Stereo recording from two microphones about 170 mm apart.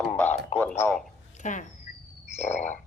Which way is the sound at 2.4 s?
45° left (ahead or behind).